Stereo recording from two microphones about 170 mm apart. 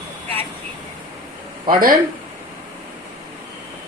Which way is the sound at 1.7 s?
55° right (ahead or behind).